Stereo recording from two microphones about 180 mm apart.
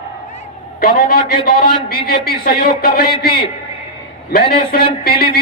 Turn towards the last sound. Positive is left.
turn(degrees=55)  # may be behind; listen again after turning